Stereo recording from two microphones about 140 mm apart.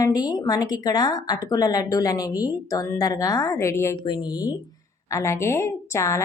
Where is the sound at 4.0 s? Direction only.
30° left (ahead or behind).